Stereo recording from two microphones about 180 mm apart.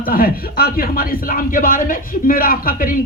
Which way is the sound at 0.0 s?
55° left (ahead or behind).